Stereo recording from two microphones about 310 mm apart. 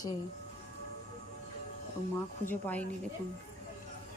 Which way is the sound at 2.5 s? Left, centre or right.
Centre.